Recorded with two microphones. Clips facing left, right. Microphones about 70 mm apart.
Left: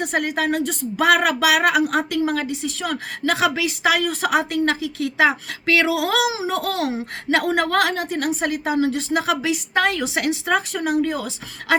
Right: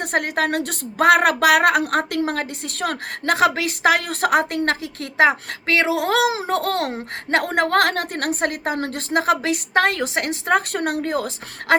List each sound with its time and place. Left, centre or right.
0.0 s a woman's voice: right
0.9 s a woman's voice: right